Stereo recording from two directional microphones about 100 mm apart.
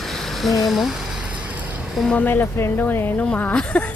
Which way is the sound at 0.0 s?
Centre (ahead or behind).